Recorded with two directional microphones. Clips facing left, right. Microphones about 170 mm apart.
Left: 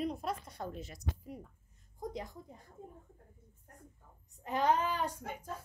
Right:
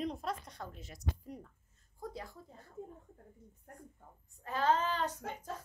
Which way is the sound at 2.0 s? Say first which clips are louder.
Left 3 dB; 20° left (ahead or behind).